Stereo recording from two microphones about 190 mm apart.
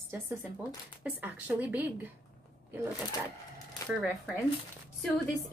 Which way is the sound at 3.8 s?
20° left (ahead or behind).